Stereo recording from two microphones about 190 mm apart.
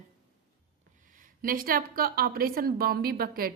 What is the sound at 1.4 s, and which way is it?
A woman's voice, 50° right (ahead or behind).